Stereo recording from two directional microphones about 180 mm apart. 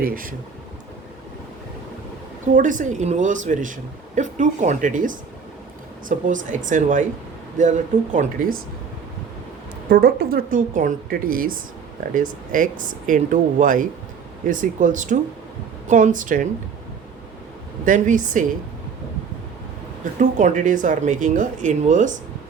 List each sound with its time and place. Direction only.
0.0 s speech: 55° right (ahead or behind)
2.5 s speech: 45° right (ahead or behind)
9.9 s speech: 60° right (ahead or behind); by 16.5 s 45° right (ahead or behind)
17.8 s speech: 45° right (ahead or behind)
20.1 s speech: 45° right (ahead or behind)